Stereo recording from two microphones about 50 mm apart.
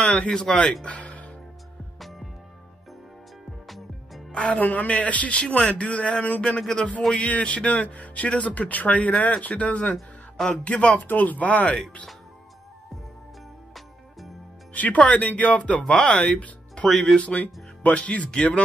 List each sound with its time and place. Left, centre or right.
0.0 s speech: left
0.3 s speech: centre
0.8 s music: left
2.0 s music: centre
3.6 s music: centre
4.3 s speech: left
9.9 s a sound: centre
10.6 s speech: left
14.7 s speech: left
16.3 s music: left
16.9 s speech: centre
17.2 s speech: left